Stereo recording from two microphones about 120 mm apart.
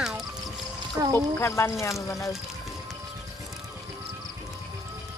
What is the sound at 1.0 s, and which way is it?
Speech, 25° right (ahead or behind).